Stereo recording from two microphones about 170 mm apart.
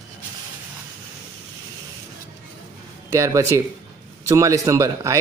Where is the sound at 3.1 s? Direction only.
15° right (ahead or behind).